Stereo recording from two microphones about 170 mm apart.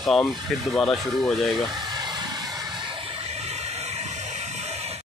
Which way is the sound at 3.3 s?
40° right (ahead or behind).